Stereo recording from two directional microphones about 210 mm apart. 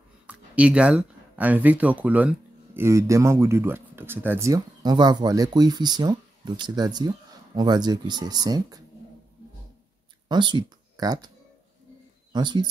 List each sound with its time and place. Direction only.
0.3 s speech: 5° right (ahead or behind)
10.2 s speech: 20° right (ahead or behind)